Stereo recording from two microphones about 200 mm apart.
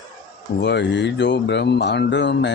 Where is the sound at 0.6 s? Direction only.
60° left (ahead or behind).